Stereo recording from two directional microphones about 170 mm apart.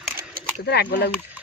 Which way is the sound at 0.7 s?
75° left (ahead or behind).